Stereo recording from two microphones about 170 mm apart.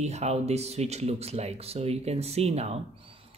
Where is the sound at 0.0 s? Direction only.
40° right (ahead or behind).